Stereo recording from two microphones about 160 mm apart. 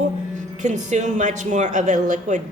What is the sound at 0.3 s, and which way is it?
A woman's voice, 50° right (ahead or behind).